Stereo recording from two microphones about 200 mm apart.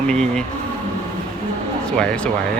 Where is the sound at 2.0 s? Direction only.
5° left (ahead or behind).